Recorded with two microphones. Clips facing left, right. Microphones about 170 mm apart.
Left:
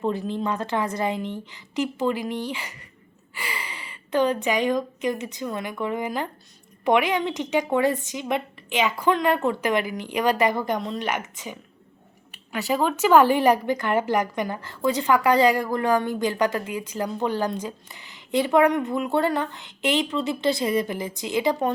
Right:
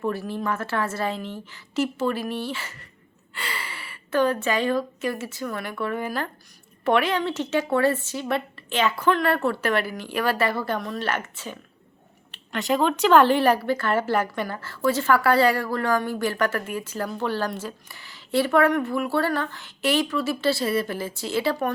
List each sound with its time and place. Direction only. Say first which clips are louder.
0.0 s speech: left 1 dB; 20° left (ahead or behind)